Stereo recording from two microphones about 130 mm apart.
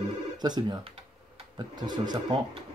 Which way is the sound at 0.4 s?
30° right (ahead or behind).